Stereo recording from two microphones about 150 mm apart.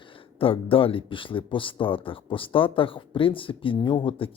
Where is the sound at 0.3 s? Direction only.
35° left (ahead or behind).